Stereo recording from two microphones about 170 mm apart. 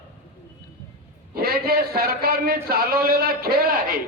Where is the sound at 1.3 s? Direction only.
65° right (ahead or behind).